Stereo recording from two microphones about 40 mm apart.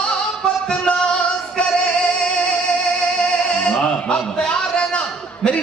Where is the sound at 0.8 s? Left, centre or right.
Left.